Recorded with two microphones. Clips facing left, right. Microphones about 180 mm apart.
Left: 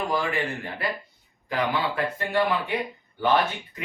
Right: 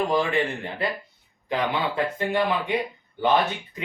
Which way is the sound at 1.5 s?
20° right (ahead or behind).